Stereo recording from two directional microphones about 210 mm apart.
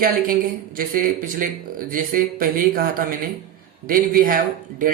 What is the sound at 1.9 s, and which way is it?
Speech, 40° right (ahead or behind).